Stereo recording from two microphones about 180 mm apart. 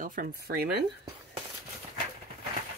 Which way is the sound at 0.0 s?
50° right (ahead or behind).